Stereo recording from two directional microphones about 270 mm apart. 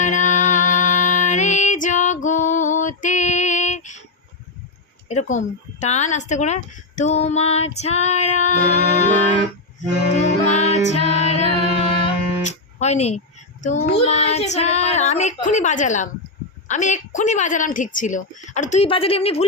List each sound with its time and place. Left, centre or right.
0.0 s music: left
5.0 s speech: left
10.2 s music: left
12.0 s speech: left